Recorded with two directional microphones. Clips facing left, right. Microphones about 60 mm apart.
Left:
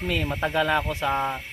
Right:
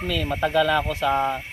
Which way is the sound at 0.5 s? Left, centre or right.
Left.